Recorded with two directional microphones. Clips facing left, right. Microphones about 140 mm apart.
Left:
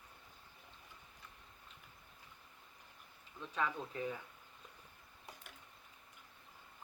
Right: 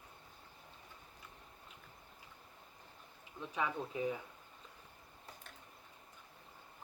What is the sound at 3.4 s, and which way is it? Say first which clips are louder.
Speech: right 1 dB; 15° right (ahead or behind).